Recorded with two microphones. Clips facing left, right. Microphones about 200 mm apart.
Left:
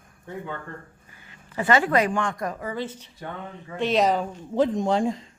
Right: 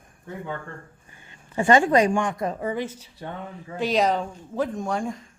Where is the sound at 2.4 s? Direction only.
25° right (ahead or behind).